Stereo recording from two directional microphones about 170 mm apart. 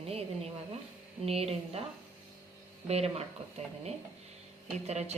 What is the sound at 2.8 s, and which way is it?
Speech, 35° right (ahead or behind).